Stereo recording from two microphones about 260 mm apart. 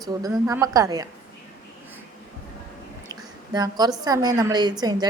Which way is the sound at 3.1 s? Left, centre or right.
Centre.